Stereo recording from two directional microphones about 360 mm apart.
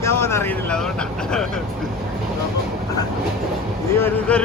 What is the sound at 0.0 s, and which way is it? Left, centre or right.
Vehicle, centre.